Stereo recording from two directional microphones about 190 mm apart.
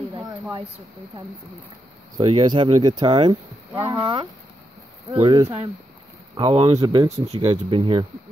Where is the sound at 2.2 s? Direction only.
30° right (ahead or behind).